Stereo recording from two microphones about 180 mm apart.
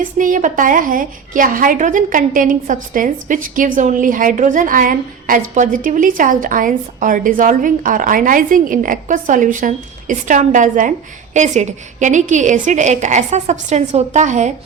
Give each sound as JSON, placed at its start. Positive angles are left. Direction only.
{"t": 0.0, "sound": "a woman's voice", "side_deg": -45}